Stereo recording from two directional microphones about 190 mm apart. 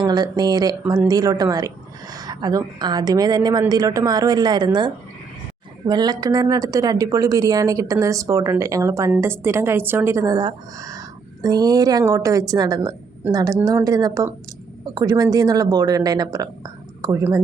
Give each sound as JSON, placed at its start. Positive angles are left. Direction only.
{"t": 0.0, "sound": "a woman's voice", "side_deg": -20}
{"t": 5.9, "sound": "a woman's voice", "side_deg": -20}